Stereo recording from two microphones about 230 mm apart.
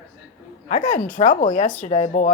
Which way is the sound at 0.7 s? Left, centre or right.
Left.